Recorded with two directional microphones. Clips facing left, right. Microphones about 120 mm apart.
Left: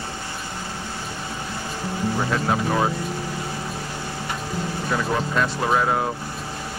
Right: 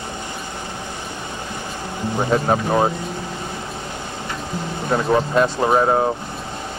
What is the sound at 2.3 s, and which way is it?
Speech, 25° right (ahead or behind).